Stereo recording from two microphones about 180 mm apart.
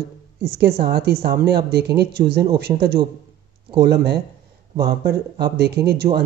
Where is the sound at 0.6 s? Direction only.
60° right (ahead or behind).